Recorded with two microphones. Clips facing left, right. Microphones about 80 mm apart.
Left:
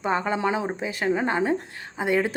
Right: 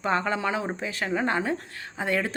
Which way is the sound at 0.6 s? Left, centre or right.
Centre.